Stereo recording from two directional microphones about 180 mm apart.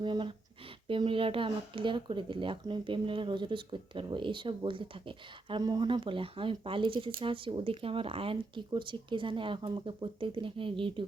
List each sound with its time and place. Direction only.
0.0 s speech: 25° right (ahead or behind)